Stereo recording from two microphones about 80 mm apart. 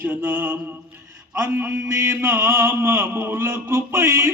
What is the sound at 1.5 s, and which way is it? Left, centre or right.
Mantra, right.